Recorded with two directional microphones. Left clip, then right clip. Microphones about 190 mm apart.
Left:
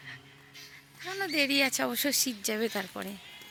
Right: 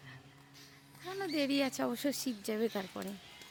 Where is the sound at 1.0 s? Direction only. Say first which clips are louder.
Left 6 dB; 5° right (ahead or behind).